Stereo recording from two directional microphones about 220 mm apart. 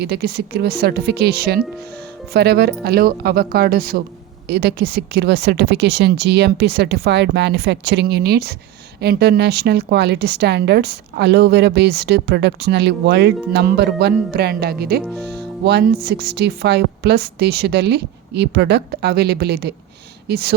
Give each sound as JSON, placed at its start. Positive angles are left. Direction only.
{"t": 0.0, "sound": "a woman's voice", "side_deg": -45}
{"t": 15.0, "sound": "speech", "side_deg": 5}
{"t": 15.3, "sound": "a woman's voice", "side_deg": -50}